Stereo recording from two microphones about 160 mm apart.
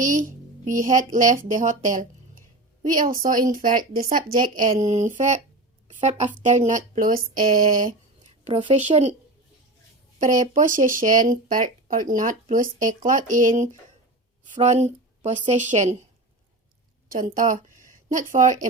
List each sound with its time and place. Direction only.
0.0 s a child's voice: 55° right (ahead or behind)
10.2 s a child's voice: 50° right (ahead or behind)
17.1 s a woman's voice: 55° right (ahead or behind)